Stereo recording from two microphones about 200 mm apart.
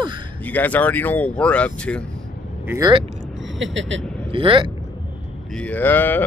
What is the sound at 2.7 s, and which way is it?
Speech, 20° right (ahead or behind).